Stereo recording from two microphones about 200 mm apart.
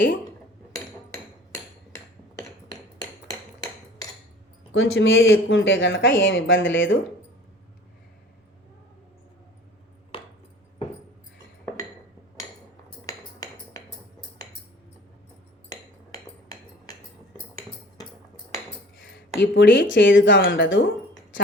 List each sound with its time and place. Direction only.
3.6 s cutlery: 20° left (ahead or behind)
4.7 s speech: 90° left; by 7.0 s 70° left (ahead or behind)
13.1 s a sound: 20° left (ahead or behind)
15.7 s cutlery: 20° left (ahead or behind)
19.4 s speech: 65° left (ahead or behind)